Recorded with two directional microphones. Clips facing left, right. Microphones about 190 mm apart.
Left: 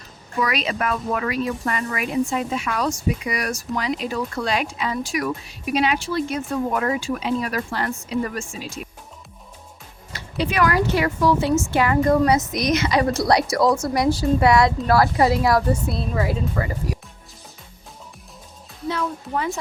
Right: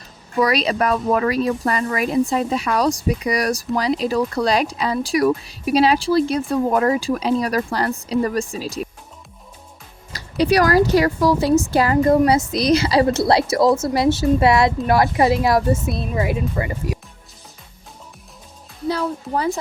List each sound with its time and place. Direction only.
0.3 s speech: 35° right (ahead or behind)
10.1 s a woman's voice: 40° right (ahead or behind); by 17.0 s 20° right (ahead or behind)
18.9 s a woman's voice: 35° right (ahead or behind)